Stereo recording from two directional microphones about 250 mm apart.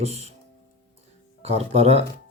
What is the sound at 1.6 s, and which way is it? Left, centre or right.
Speech, right.